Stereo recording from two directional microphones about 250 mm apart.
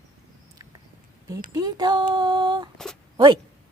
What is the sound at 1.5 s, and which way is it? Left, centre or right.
Speech, centre.